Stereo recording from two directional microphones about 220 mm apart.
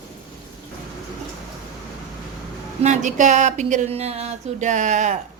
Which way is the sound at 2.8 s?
35° right (ahead or behind).